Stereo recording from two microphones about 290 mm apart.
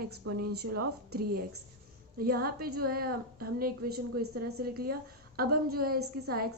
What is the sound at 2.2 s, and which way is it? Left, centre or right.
A woman's voice, right.